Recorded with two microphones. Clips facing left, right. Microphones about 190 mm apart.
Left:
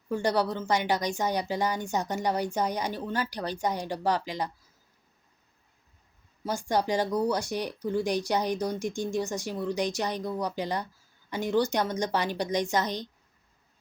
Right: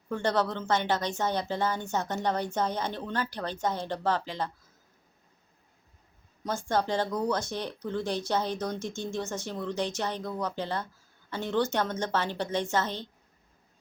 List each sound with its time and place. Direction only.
0.1 s a woman's voice: 10° left (ahead or behind)
6.4 s a woman's voice: 15° left (ahead or behind)